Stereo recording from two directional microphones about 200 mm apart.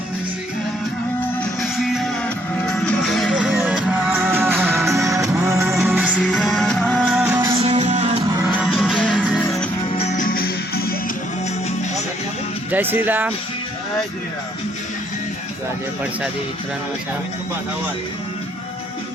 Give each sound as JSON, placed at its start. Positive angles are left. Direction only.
{"t": 1.6, "sound": "music", "side_deg": 0}
{"t": 6.1, "sound": "music", "side_deg": 0}
{"t": 7.2, "sound": "music", "side_deg": -10}
{"t": 7.6, "sound": "music", "side_deg": -35}
{"t": 8.5, "sound": "music", "side_deg": -5}
{"t": 10.0, "sound": "music", "side_deg": 35}
{"t": 12.7, "sound": "speech", "side_deg": -10}